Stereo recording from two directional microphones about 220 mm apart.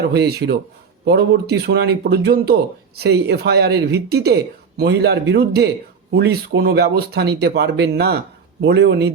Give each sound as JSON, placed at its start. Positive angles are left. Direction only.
{"t": 0.1, "sound": "speech", "side_deg": -50}